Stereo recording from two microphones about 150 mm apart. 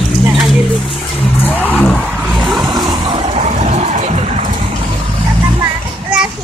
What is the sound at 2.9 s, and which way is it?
Vehicle, 30° right (ahead or behind).